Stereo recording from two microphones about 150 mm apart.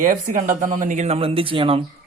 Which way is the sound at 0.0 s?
65° right (ahead or behind).